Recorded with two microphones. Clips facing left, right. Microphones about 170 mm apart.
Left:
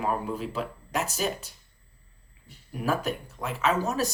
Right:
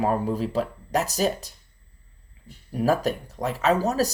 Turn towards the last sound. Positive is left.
turn(degrees=-35)  # may be behind; listen again after turning